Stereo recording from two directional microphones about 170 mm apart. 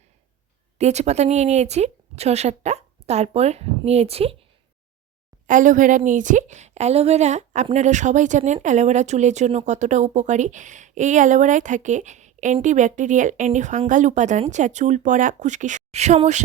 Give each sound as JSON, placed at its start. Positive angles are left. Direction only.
{"t": 0.8, "sound": "speech", "side_deg": -40}
{"t": 5.5, "sound": "speech", "side_deg": -50}